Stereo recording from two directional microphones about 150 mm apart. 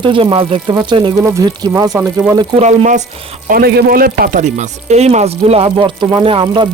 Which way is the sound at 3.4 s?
80° right.